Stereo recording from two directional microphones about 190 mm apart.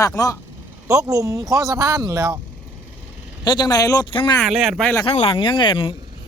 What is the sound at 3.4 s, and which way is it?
Speech, 20° left (ahead or behind).